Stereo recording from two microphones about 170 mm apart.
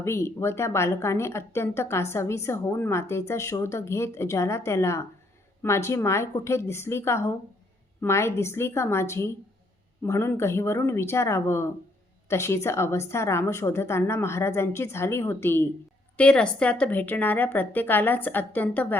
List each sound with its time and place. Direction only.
0.0 s speech: 15° left (ahead or behind)